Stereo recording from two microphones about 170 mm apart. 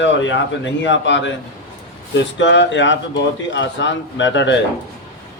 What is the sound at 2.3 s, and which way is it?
A man's voice, 90° left.